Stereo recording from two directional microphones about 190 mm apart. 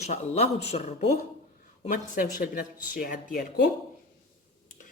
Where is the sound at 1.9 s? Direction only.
50° left (ahead or behind).